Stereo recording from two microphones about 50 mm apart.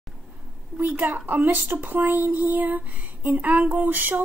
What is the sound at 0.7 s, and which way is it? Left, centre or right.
Speech, right.